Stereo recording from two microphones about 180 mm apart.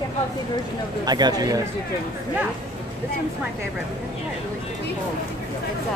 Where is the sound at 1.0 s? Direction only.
20° right (ahead or behind).